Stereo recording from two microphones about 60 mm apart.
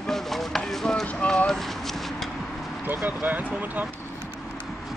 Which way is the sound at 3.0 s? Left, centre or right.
Right.